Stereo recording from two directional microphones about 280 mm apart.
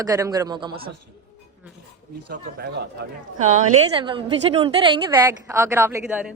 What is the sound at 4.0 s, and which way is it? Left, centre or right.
A woman's voice, centre.